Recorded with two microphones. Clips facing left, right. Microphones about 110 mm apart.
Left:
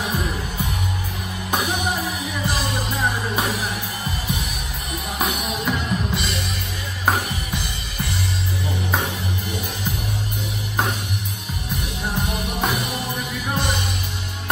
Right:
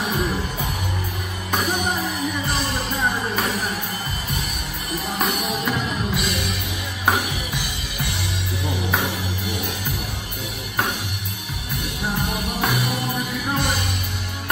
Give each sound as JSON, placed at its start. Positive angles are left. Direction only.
{"t": 1.5, "sound": "music", "side_deg": 0}
{"t": 4.9, "sound": "music", "side_deg": 0}
{"t": 7.5, "sound": "music", "side_deg": -65}
{"t": 11.8, "sound": "music", "side_deg": 0}